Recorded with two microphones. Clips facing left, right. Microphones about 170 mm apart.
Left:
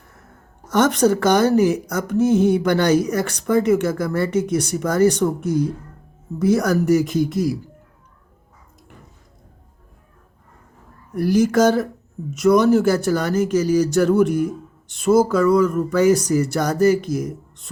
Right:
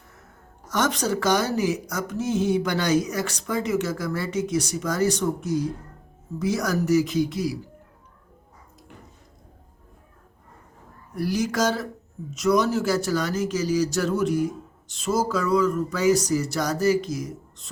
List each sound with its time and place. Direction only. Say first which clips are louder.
0.7 s speech: left 8 dB; 55° left (ahead or behind)
11.1 s speech: left 8 dB; 50° left (ahead or behind)